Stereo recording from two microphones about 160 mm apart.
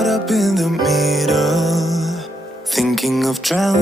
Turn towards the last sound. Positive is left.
turn(degrees=0)  # may be behind; listen again after turning